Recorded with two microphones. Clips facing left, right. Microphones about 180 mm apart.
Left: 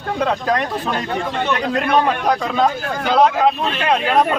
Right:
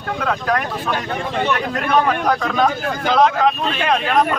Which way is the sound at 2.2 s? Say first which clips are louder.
Even; 10° left (ahead or behind).